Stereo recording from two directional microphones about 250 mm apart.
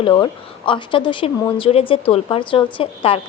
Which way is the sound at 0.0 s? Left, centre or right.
Centre.